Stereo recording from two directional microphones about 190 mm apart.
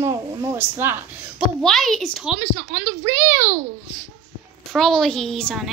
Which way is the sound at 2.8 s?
40° right (ahead or behind).